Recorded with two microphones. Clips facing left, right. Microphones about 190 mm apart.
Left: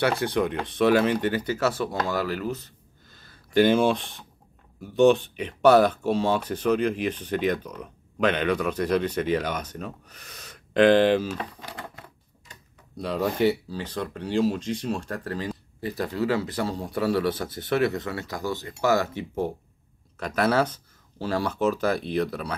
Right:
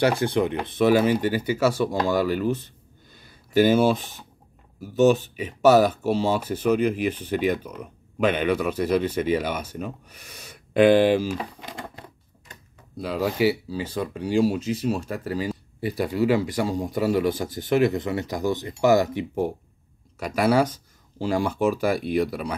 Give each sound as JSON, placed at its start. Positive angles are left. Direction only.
{"t": 0.1, "sound": "speech", "side_deg": -10}
{"t": 3.1, "sound": "a sound", "side_deg": -15}
{"t": 4.7, "sound": "speech", "side_deg": -5}
{"t": 12.9, "sound": "speech", "side_deg": 0}